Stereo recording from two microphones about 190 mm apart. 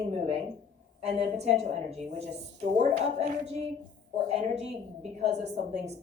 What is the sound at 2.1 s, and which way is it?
A woman's voice, 35° right (ahead or behind).